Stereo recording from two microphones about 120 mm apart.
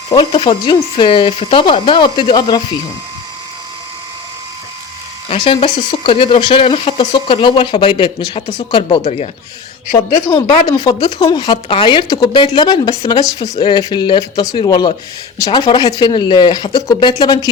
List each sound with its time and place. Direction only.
0.1 s speech: 40° left (ahead or behind)
5.4 s speech: 45° left (ahead or behind)
9.0 s speech: 65° left (ahead or behind)
10.2 s speech: 40° left (ahead or behind)